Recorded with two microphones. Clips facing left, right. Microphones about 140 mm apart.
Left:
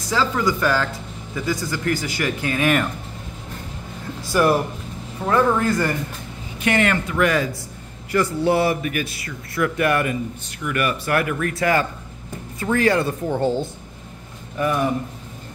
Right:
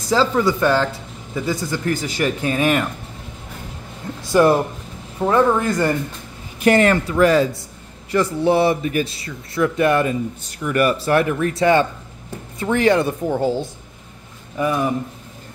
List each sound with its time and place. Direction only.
0.1 s speech: 30° right (ahead or behind)
4.3 s speech: 25° right (ahead or behind)
6.6 s speech: 35° right (ahead or behind)
8.1 s speech: 20° right (ahead or behind)